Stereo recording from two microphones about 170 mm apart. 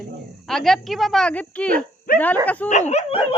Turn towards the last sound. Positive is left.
turn(degrees=35)  # may be behind; listen again after turning